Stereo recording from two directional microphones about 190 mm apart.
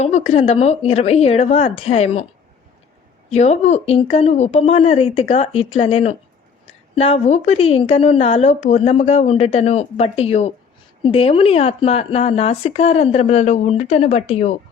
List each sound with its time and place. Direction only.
0.0 s speech: 35° left (ahead or behind)
3.2 s speech: 35° left (ahead or behind)